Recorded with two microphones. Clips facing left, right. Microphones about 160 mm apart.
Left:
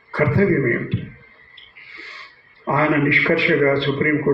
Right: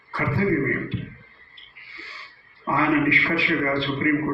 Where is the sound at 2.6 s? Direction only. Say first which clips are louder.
Left 4 dB; 40° left (ahead or behind).